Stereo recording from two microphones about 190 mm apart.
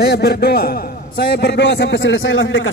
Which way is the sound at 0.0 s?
60° left (ahead or behind).